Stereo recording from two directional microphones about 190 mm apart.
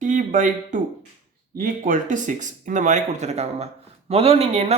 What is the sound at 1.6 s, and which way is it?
Speech, 45° right (ahead or behind).